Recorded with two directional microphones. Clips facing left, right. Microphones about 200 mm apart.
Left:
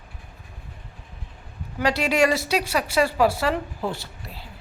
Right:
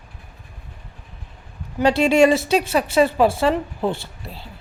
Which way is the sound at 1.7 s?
25° right (ahead or behind).